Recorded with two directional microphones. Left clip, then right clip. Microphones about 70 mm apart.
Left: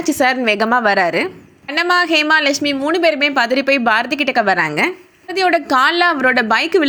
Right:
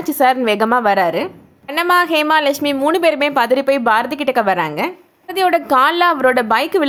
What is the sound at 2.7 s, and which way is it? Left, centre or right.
Speech, right.